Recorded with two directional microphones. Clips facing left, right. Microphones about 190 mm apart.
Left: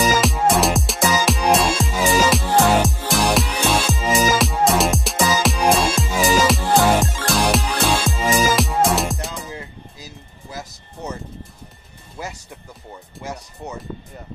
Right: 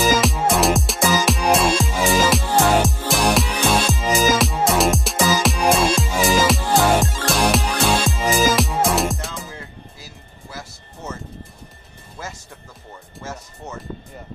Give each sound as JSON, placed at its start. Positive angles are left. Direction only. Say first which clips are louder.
{"t": 0.0, "sound": "music", "louder": "even", "side_deg": 0}
{"t": 9.5, "sound": "music", "louder": "left 3 dB", "side_deg": 20}
{"t": 12.2, "sound": "music", "louder": "left 3 dB", "side_deg": 15}